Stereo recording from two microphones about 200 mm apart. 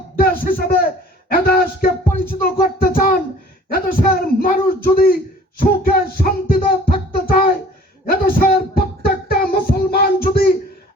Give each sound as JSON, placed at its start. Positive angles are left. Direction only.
{"t": 0.2, "sound": "a man's voice", "side_deg": 45}
{"t": 1.3, "sound": "music", "side_deg": 50}
{"t": 5.5, "sound": "music", "side_deg": 45}
{"t": 8.0, "sound": "child singing", "side_deg": 50}